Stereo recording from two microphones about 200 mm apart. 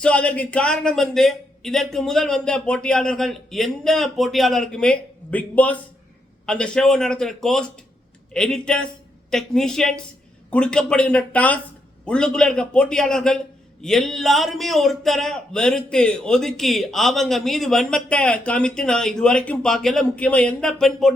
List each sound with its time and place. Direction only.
0.0 s a man's voice: 5° left (ahead or behind)